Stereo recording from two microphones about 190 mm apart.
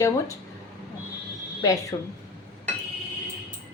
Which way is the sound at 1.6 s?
15° left (ahead or behind).